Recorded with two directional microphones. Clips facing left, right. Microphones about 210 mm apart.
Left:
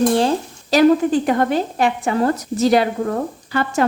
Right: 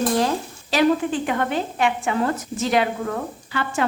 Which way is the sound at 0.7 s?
40° left (ahead or behind).